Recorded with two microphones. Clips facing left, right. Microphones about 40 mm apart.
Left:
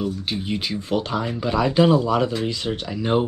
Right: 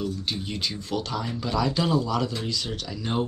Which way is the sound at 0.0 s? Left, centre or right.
Centre.